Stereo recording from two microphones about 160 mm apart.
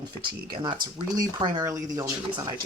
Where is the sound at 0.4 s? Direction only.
25° right (ahead or behind).